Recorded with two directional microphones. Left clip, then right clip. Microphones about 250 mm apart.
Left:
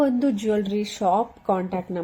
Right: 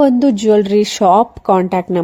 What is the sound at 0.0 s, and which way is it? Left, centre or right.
Speech, right.